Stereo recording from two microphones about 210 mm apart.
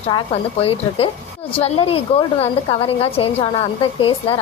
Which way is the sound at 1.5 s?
25° left (ahead or behind).